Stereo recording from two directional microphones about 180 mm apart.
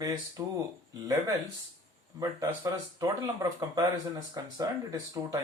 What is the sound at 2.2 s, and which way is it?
Speech, 20° right (ahead or behind).